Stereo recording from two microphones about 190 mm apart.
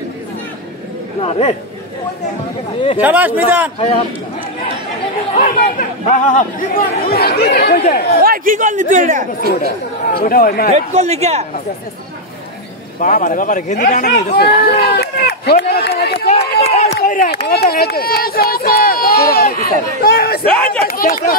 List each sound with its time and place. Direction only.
1.2 s speech: 35° left (ahead or behind)
3.0 s speech: 10° right (ahead or behind)
5.4 s speech: 45° left (ahead or behind)
7.1 s speech: 55° left (ahead or behind)
8.2 s a man's voice: 45° right (ahead or behind)
10.0 s speech: 50° left (ahead or behind)
10.7 s a man's voice: 35° right (ahead or behind)
13.0 s speech: 40° left (ahead or behind)
14.3 s run: 60° left (ahead or behind)
16.7 s run: 35° left (ahead or behind)
17.0 s speech: 45° left (ahead or behind)
20.5 s speech: 5° left (ahead or behind)
20.8 s speech: 50° left (ahead or behind)